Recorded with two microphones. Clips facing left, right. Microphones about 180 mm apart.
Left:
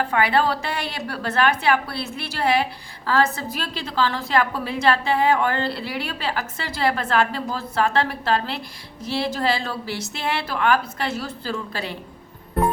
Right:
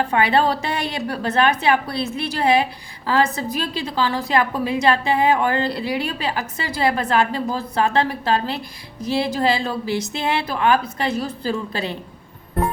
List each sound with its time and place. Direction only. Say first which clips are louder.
0.0 s a woman's voice: right 2 dB; 20° right (ahead or behind)